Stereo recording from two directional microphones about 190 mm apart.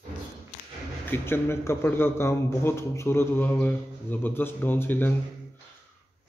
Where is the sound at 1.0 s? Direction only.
10° left (ahead or behind).